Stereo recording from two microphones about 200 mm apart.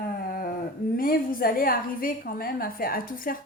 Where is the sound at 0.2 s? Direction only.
45° left (ahead or behind).